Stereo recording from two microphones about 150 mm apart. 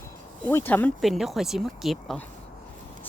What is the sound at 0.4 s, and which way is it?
Speech, 10° left (ahead or behind).